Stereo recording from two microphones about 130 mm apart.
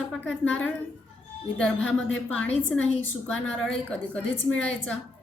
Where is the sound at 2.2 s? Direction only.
10° left (ahead or behind).